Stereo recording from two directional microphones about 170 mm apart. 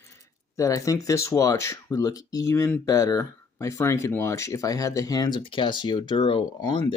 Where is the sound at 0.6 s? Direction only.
20° left (ahead or behind).